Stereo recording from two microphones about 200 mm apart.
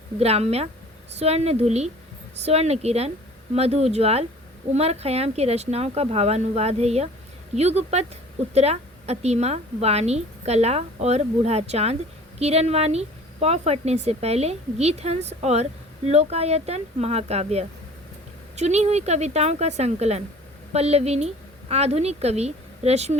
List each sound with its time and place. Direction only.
0.2 s a woman's voice: 30° right (ahead or behind)